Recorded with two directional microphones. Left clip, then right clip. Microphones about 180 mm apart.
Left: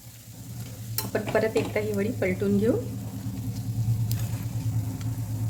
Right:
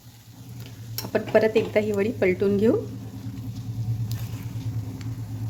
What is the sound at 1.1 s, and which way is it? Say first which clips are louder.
Speech: right 5 dB; 45° right (ahead or behind).